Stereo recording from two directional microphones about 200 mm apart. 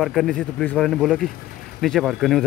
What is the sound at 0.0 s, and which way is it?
Speech, centre (ahead or behind).